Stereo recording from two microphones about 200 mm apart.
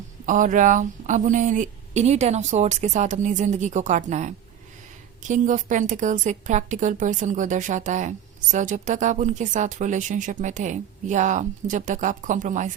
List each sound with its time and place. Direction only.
0.3 s a woman's voice: 40° right (ahead or behind)